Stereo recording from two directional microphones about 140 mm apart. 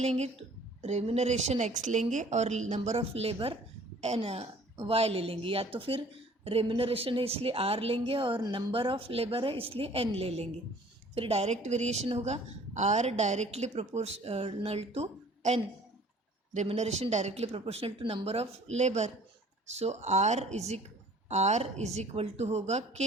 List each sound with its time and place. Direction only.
0.8 s a woman's voice: 50° right (ahead or behind)
16.6 s a woman's voice: 50° right (ahead or behind)